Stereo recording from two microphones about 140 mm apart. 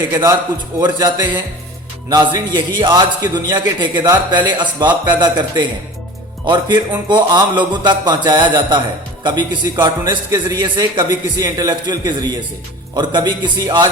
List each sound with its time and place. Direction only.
0.1 s a man's voice: 20° right (ahead or behind)
0.8 s a man's voice: 30° right (ahead or behind)